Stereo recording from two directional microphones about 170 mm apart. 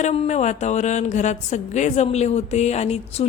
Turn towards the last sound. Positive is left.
turn(degrees=40)  # may be behind; listen again after turning